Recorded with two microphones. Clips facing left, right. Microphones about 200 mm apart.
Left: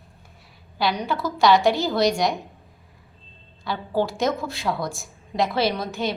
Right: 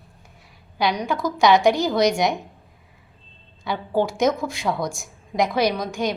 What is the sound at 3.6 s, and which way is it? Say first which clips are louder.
Speech: right 2 dB; 20° right (ahead or behind).